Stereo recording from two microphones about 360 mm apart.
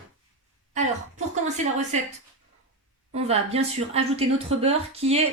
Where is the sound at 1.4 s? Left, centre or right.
Centre.